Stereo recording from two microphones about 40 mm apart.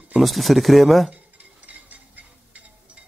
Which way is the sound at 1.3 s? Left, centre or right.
Right.